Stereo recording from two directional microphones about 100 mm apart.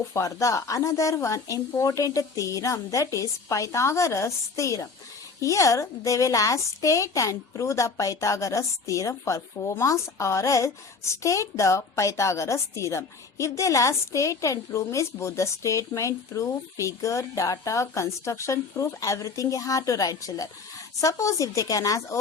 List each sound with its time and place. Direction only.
0.1 s a woman's voice: 30° left (ahead or behind)